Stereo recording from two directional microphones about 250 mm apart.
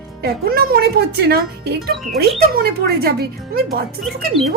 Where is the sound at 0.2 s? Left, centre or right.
Right.